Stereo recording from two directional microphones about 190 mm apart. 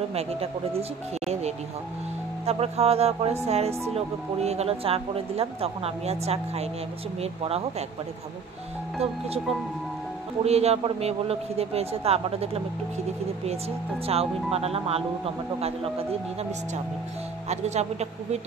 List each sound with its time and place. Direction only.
0.1 s speech: 30° right (ahead or behind)
10.4 s speech: 35° right (ahead or behind)
14.0 s speech: 30° right (ahead or behind)
17.5 s speech: 35° right (ahead or behind)